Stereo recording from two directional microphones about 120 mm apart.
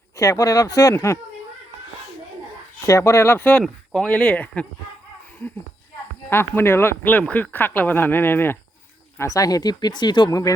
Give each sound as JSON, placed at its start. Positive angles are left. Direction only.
{"t": 0.2, "sound": "speech", "side_deg": 30}
{"t": 2.8, "sound": "speech", "side_deg": 25}
{"t": 6.3, "sound": "speech", "side_deg": 20}